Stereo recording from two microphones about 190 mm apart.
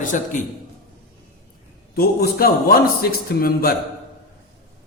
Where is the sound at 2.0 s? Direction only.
55° left (ahead or behind).